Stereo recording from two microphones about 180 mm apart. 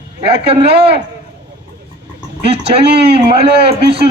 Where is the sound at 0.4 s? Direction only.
30° right (ahead or behind).